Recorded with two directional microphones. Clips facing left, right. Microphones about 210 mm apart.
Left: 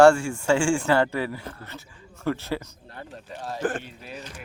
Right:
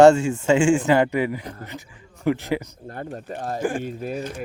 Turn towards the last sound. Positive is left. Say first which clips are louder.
# right 12 dB
turn(degrees=-50)  # may be behind; listen again after turning